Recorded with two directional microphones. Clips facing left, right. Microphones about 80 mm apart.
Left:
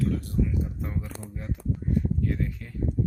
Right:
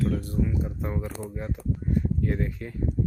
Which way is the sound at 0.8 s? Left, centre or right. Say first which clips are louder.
Right 3 dB; right.